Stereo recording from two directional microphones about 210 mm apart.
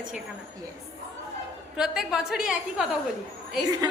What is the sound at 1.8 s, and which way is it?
A woman's voice, centre (ahead or behind).